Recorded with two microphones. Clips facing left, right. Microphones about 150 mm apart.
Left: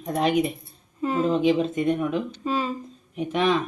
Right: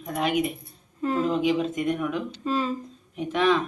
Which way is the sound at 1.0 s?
5° left (ahead or behind).